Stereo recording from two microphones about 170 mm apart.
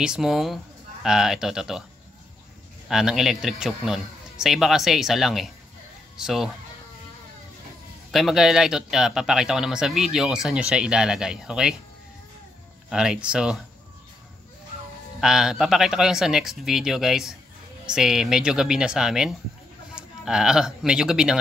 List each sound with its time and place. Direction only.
0.0 s a man's voice: 5° right (ahead or behind)
2.9 s a man's voice: 5° right (ahead or behind)
8.1 s a man's voice: centre (ahead or behind)
12.9 s a man's voice: 5° right (ahead or behind)
15.1 s a man's voice: 5° right (ahead or behind)